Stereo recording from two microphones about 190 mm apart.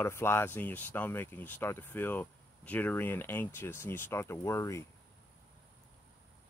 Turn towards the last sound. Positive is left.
turn(degrees=15)  # may be behind; listen again after turning